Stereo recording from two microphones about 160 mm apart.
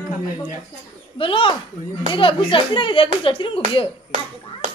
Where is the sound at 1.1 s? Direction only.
35° left (ahead or behind).